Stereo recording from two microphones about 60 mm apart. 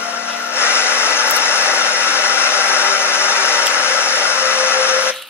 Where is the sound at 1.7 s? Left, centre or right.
Left.